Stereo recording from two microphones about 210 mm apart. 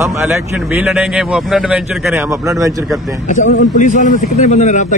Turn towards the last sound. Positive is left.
turn(degrees=35)  # may be behind; listen again after turning